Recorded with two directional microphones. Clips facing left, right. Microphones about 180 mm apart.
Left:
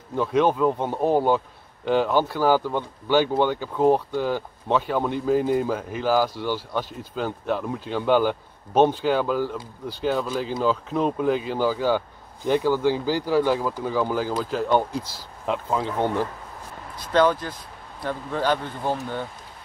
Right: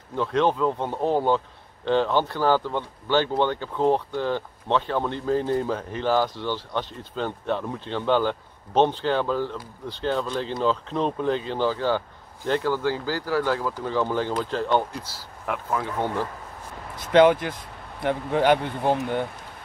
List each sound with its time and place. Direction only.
0.1 s speech: 10° left (ahead or behind)
15.4 s speech: 20° left (ahead or behind)
17.1 s speech: 20° right (ahead or behind)